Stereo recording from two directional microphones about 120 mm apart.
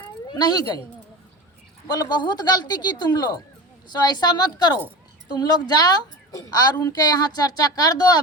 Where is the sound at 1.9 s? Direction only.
35° left (ahead or behind).